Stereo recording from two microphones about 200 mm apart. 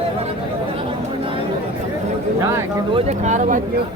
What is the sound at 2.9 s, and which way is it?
Speech, 35° right (ahead or behind).